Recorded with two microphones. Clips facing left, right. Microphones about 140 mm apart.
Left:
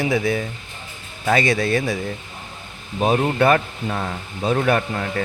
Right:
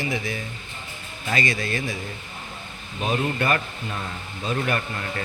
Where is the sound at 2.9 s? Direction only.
55° left (ahead or behind); by 5.1 s 90° left.